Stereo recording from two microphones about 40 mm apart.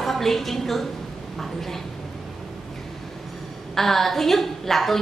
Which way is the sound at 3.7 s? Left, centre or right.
Centre.